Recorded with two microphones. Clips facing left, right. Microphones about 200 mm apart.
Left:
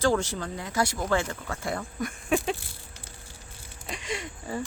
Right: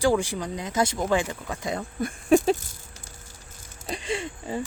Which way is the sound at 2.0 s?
40° right (ahead or behind).